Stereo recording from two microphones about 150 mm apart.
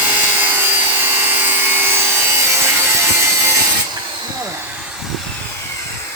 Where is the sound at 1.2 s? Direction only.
15° right (ahead or behind).